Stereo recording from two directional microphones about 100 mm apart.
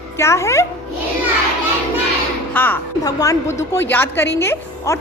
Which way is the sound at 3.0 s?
35° left (ahead or behind).